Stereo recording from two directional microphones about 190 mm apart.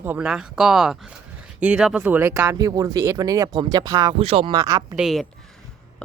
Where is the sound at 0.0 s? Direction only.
10° right (ahead or behind).